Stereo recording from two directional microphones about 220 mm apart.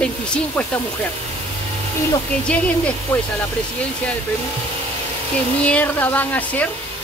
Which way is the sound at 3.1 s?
5° left (ahead or behind).